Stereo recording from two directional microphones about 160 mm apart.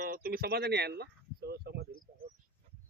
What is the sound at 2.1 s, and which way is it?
Cricket, 70° right (ahead or behind).